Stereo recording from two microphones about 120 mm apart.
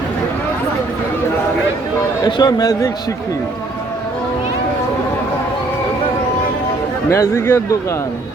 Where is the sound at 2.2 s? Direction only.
35° left (ahead or behind).